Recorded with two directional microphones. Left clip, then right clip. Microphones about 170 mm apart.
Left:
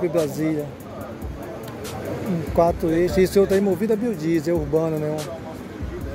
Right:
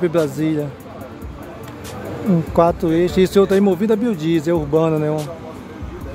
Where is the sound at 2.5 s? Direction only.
20° right (ahead or behind).